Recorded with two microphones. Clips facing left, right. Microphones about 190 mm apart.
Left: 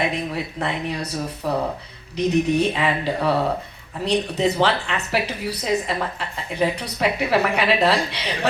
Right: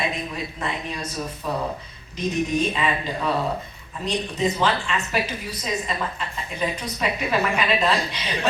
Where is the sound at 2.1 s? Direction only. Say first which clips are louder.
Left 5 dB; 70° left (ahead or behind).